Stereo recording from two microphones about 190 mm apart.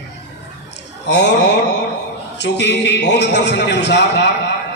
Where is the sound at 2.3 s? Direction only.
65° left (ahead or behind).